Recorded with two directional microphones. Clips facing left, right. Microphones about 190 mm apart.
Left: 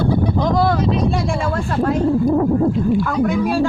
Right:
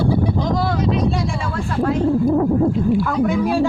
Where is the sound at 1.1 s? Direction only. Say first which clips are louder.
Left 3 dB; 50° left (ahead or behind).